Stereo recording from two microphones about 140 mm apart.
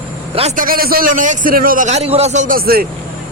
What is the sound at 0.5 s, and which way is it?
A man's voice, 85° right.